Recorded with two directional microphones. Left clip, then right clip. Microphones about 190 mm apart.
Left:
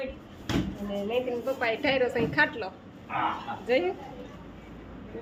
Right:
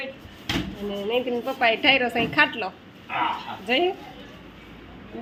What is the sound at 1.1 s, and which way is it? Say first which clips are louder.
A woman's voice: right 4 dB; 40° right (ahead or behind).